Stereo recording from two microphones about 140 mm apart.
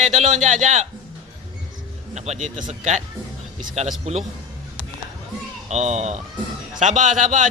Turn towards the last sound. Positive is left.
turn(degrees=-65)  # may be behind; listen again after turning